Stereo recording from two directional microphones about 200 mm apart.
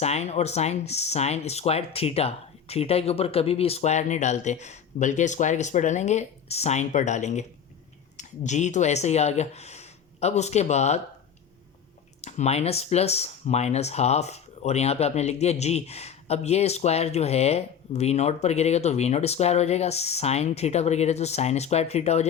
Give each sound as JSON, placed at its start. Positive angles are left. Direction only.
{"t": 0.0, "sound": "speech", "side_deg": 35}
{"t": 12.2, "sound": "speech", "side_deg": 30}